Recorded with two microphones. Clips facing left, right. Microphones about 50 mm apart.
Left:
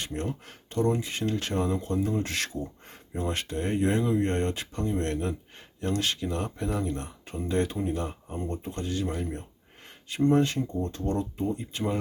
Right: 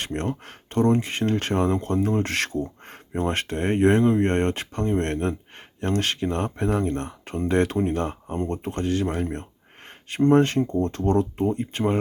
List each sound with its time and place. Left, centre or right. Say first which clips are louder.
0.0 s speech: right 5 dB; right